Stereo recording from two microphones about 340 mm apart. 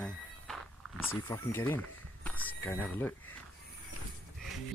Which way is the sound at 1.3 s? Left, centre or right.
Centre.